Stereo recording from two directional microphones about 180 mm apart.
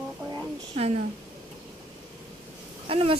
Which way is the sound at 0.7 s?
35° right (ahead or behind).